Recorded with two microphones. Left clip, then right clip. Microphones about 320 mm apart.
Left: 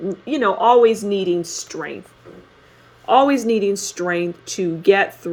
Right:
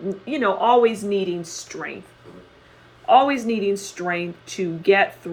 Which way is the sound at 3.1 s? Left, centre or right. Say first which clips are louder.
Left 2 dB; left.